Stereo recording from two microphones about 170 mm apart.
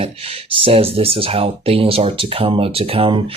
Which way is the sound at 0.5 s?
35° right (ahead or behind).